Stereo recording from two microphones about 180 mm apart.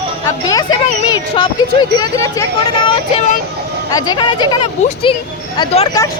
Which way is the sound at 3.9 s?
25° left (ahead or behind).